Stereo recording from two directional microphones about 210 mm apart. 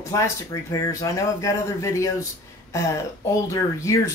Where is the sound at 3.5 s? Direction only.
15° left (ahead or behind).